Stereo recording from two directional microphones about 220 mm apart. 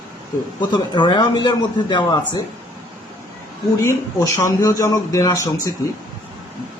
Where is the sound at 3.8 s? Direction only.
15° left (ahead or behind).